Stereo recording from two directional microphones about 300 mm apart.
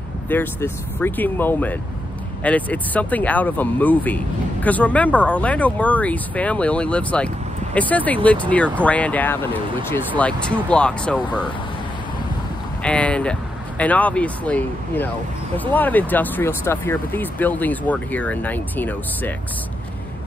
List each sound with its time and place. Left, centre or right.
0.3 s speech: centre
12.8 s speech: centre